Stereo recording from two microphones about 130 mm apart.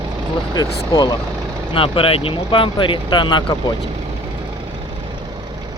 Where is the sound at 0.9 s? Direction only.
30° left (ahead or behind).